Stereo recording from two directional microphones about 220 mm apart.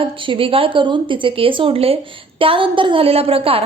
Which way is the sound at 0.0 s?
25° right (ahead or behind).